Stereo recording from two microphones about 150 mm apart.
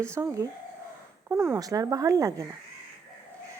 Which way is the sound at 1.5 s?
25° right (ahead or behind).